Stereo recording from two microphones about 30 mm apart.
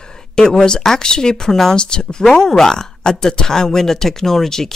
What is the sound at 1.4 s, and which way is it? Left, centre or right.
Speech, centre.